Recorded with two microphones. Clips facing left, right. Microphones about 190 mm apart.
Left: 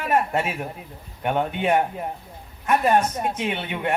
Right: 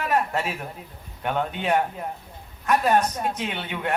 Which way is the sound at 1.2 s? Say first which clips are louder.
Left 3 dB; 10° left (ahead or behind).